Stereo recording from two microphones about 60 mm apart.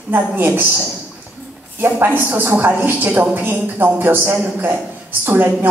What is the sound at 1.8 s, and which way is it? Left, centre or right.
A woman's voice, right.